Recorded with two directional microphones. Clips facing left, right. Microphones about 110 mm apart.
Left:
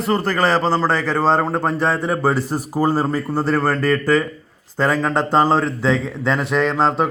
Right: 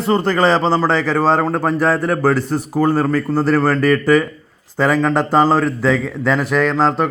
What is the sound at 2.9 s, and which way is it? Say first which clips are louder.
Speech: right 3 dB; 25° left (ahead or behind).